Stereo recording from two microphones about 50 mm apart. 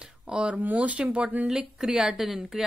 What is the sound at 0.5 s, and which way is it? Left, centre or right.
Speech, right.